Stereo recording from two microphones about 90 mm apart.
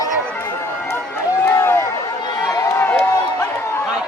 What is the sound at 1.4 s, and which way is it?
Run, 25° left (ahead or behind).